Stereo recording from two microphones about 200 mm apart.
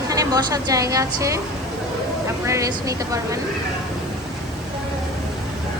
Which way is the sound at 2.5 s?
15° right (ahead or behind).